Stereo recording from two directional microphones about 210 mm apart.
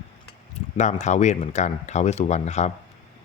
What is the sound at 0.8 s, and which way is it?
Speech, 35° left (ahead or behind).